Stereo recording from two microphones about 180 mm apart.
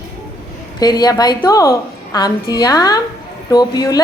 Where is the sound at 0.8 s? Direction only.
20° left (ahead or behind).